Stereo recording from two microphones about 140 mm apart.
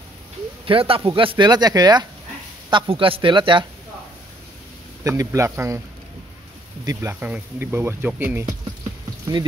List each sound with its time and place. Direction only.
0.7 s a man's voice: 40° right (ahead or behind)
2.7 s a man's voice: 40° right (ahead or behind)
5.0 s speech: 25° right (ahead or behind)
6.9 s speech: 20° right (ahead or behind)